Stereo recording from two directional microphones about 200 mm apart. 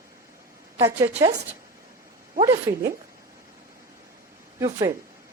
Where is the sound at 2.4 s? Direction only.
20° right (ahead or behind).